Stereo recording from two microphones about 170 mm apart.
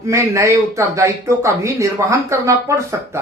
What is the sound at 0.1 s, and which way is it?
Speech, 20° right (ahead or behind).